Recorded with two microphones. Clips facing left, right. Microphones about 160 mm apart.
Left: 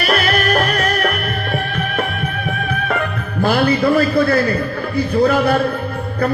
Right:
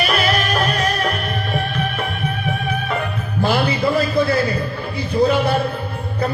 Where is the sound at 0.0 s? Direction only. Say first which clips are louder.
Left 2 dB; 55° left (ahead or behind).